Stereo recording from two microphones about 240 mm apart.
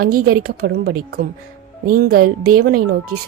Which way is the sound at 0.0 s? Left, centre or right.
Right.